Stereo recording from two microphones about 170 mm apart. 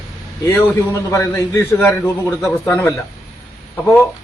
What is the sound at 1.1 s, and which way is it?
A man's voice, 20° left (ahead or behind).